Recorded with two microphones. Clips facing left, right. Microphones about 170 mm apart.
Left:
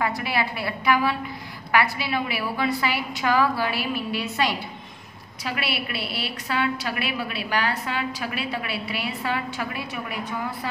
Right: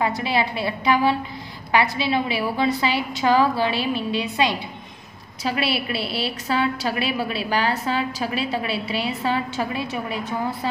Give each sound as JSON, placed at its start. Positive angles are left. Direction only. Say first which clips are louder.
{"t": 0.2, "sound": "a woman's voice", "louder": "right 4 dB", "side_deg": -25}
{"t": 5.4, "sound": "a woman's voice", "louder": "right 5 dB", "side_deg": -30}